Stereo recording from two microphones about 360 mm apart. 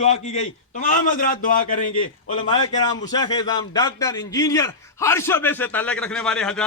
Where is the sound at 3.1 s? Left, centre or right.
Centre.